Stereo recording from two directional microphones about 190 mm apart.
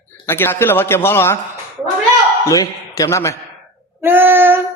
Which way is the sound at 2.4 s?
20° left (ahead or behind).